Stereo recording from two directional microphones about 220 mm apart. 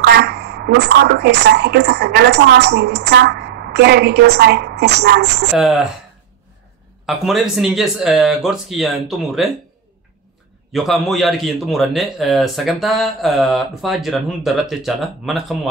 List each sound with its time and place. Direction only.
0.0 s speech: 50° right (ahead or behind)
5.5 s a man's voice: centre (ahead or behind)
7.1 s a man's voice: centre (ahead or behind)
10.7 s a man's voice: centre (ahead or behind)